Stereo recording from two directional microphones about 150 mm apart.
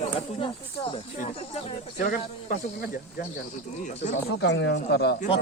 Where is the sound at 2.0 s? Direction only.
65° left (ahead or behind).